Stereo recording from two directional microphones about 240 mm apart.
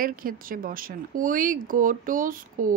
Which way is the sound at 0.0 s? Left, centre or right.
Right.